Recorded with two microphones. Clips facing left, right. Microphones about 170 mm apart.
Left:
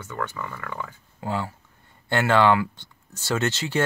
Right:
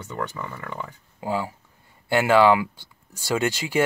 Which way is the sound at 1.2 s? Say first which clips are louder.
Right 2 dB; 10° right (ahead or behind).